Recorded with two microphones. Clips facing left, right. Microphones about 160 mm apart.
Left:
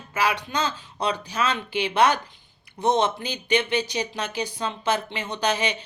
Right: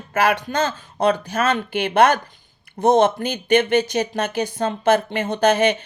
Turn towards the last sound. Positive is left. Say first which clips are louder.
# right 8 dB
turn(degrees=-55)  # may be behind; listen again after turning